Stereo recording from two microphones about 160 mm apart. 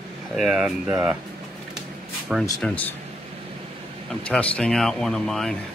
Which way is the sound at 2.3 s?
Centre (ahead or behind).